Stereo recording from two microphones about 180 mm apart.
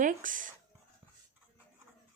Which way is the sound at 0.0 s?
45° right (ahead or behind).